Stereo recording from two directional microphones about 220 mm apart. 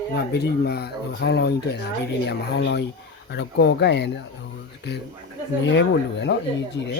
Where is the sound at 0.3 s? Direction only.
50° left (ahead or behind).